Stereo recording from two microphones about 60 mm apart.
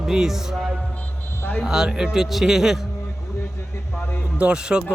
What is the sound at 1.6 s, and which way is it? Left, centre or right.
Speech, centre.